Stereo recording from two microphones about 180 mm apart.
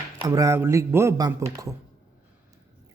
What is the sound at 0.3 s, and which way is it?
Speech, 20° right (ahead or behind).